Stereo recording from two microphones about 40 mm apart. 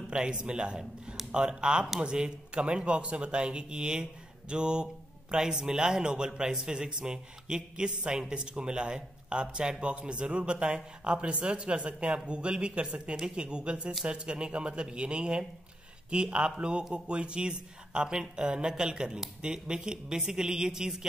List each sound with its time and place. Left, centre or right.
0.1 s a man's voice: right